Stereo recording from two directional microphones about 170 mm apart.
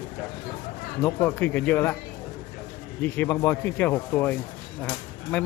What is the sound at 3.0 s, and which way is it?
Speech, 10° left (ahead or behind).